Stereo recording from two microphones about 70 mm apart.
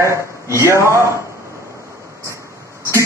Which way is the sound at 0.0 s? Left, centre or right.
Right.